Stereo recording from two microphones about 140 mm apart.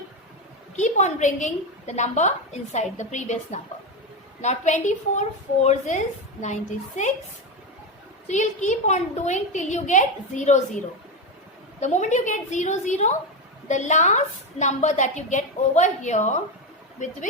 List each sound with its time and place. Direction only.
0.8 s a woman's voice: 60° left (ahead or behind)
8.3 s a woman's voice: 60° left (ahead or behind)
11.8 s a woman's voice: 55° left (ahead or behind)